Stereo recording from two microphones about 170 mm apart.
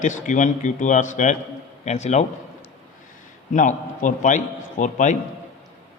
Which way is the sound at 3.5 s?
45° left (ahead or behind).